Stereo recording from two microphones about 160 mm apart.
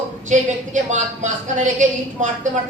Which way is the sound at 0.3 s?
50° right (ahead or behind).